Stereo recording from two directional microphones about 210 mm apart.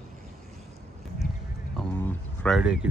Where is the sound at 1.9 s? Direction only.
10° left (ahead or behind).